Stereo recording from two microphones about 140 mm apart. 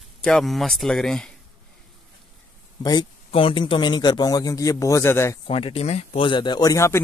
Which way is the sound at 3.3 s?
40° left (ahead or behind).